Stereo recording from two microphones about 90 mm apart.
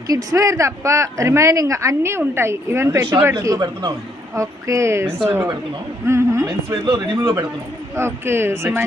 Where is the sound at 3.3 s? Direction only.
45° right (ahead or behind).